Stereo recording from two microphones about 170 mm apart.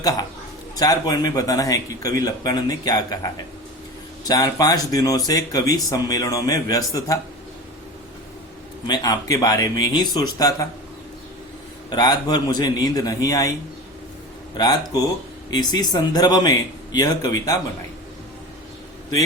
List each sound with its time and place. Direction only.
0.0 s speech: 20° left (ahead or behind)
4.2 s speech: 20° left (ahead or behind)
8.9 s speech: 25° left (ahead or behind)
11.9 s speech: 25° left (ahead or behind)
14.5 s speech: 25° left (ahead or behind)